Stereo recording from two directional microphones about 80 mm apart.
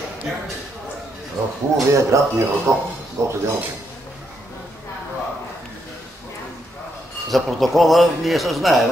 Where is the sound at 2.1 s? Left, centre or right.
Right.